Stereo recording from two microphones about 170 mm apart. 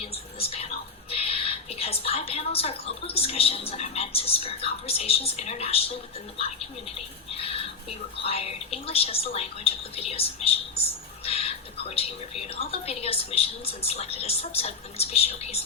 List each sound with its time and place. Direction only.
0.0 s whispering: 35° left (ahead or behind)
1.1 s a woman's voice: 35° left (ahead or behind)
7.3 s a woman's voice: 35° left (ahead or behind)